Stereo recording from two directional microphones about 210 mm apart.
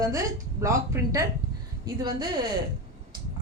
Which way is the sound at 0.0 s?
15° right (ahead or behind).